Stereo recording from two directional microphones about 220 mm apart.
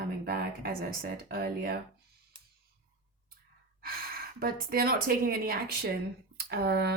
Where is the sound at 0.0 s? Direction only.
45° right (ahead or behind).